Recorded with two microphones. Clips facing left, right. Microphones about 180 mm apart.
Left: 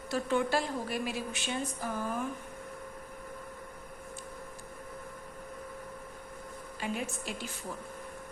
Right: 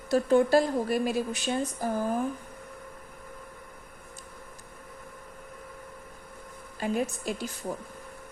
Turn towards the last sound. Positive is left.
turn(degrees=-40)  # may be behind; listen again after turning